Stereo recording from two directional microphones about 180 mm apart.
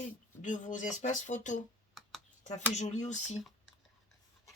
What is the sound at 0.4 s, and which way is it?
Speech, 45° left (ahead or behind).